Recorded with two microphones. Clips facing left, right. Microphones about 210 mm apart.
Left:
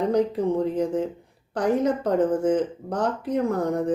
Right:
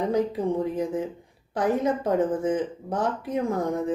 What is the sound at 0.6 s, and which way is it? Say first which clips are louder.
Speech: left 3 dB; 70° left (ahead or behind).